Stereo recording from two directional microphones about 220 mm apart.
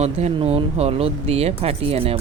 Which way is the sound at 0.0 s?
30° right (ahead or behind).